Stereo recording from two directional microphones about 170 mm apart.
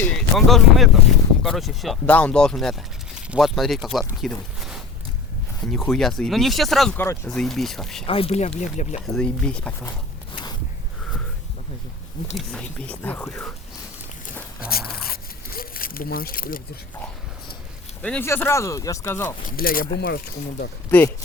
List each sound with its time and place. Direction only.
0.0 s speech: 5° left (ahead or behind)
6.9 s speech: 10° left (ahead or behind)
7.3 s speech: centre (ahead or behind)
8.0 s speech: 35° left (ahead or behind)
9.0 s speech: 5° left (ahead or behind)
10.3 s a sound: 25° left (ahead or behind)
12.5 s speech: 5° left (ahead or behind)
14.7 s a sound: 65° left (ahead or behind)
18.0 s speech: 10° left (ahead or behind)
19.5 s speech: 55° left (ahead or behind)